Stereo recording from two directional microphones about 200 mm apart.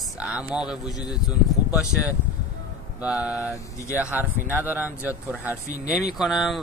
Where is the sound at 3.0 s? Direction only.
5° right (ahead or behind).